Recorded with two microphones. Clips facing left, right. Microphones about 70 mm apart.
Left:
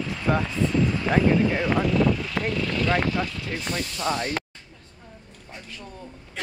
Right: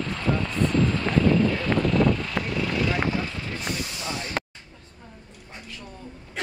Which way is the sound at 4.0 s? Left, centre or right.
Left.